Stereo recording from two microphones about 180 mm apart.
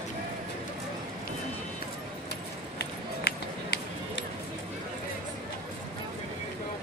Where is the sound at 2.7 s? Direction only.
65° left (ahead or behind).